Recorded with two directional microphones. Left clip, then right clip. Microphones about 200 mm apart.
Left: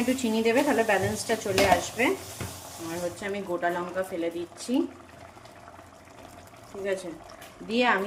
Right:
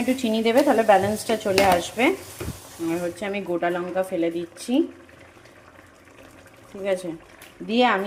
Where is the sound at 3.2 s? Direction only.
20° right (ahead or behind).